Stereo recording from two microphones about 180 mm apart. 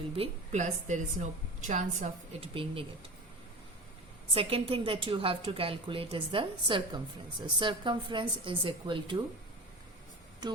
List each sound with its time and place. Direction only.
0.2 s a woman's voice: 40° right (ahead or behind)
4.4 s a woman's voice: 30° right (ahead or behind)